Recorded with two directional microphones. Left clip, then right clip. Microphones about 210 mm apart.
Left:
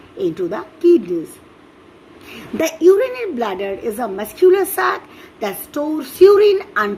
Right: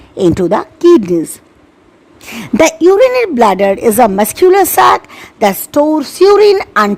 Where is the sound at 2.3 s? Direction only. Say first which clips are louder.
Right 11 dB; 50° right (ahead or behind).